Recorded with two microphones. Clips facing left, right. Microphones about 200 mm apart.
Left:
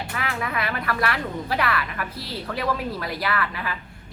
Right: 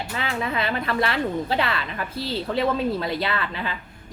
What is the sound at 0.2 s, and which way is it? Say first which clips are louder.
Speech: right 2 dB; 25° right (ahead or behind).